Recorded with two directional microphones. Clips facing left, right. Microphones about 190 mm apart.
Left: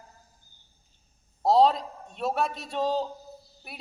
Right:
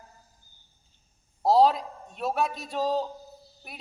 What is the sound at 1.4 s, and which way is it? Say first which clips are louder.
A man's voice: even; 5° right (ahead or behind).